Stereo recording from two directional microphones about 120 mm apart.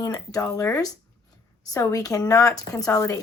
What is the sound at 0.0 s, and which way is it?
A woman's voice, 30° left (ahead or behind).